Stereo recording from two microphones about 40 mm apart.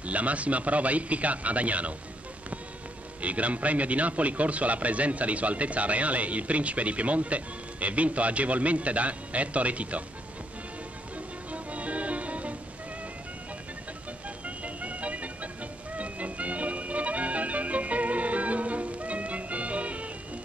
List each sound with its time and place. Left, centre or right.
0.0 s a man's voice: right
3.2 s a man's voice: right
11.1 s music: right
14.4 s music: right